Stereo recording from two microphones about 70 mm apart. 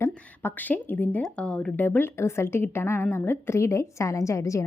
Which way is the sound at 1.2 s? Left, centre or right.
Centre.